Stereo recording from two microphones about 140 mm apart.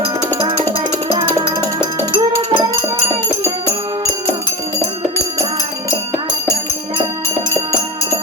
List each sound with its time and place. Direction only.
0.3 s music: 30° right (ahead or behind)